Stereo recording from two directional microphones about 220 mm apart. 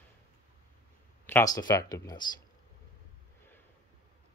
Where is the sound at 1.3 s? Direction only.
15° left (ahead or behind).